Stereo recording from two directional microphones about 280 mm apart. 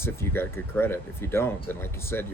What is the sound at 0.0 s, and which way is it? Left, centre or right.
Speech, centre.